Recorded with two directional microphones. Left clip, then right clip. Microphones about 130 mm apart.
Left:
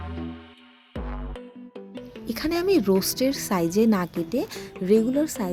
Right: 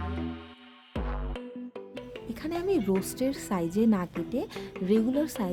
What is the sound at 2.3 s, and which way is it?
A woman's voice, 25° left (ahead or behind).